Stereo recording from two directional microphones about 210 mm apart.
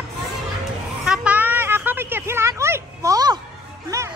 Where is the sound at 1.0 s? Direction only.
5° right (ahead or behind).